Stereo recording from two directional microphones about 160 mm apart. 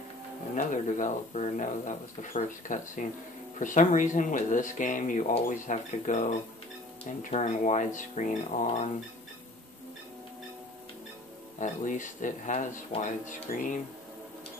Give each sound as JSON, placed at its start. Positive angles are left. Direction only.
{"t": 0.6, "sound": "speech", "side_deg": 50}
{"t": 11.6, "sound": "speech", "side_deg": 55}
{"t": 13.5, "sound": "speech", "side_deg": 65}